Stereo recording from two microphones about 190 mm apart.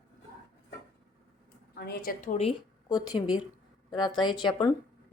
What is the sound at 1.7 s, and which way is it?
Speech, 55° left (ahead or behind).